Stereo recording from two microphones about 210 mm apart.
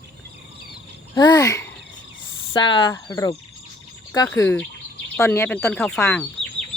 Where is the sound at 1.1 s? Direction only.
20° left (ahead or behind).